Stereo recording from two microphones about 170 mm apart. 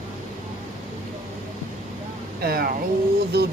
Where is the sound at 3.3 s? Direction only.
75° right (ahead or behind).